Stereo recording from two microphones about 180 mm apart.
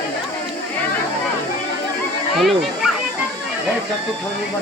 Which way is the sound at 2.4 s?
Centre (ahead or behind).